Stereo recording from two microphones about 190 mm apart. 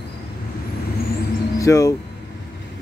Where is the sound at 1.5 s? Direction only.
15° left (ahead or behind).